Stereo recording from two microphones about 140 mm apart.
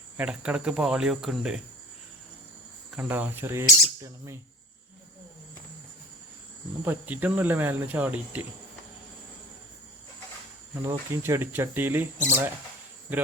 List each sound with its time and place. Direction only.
0.2 s speech: 5° right (ahead or behind)
2.9 s cricket: 10° right (ahead or behind)
6.8 s cricket: 10° right (ahead or behind)
10.8 s cricket: 20° right (ahead or behind)